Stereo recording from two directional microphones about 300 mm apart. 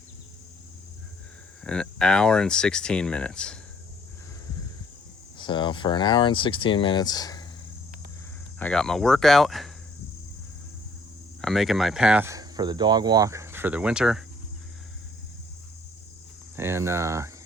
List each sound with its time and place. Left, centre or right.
1.6 s speech: centre
5.4 s speech: centre
8.5 s speech: centre
11.3 s speech: centre
16.6 s speech: centre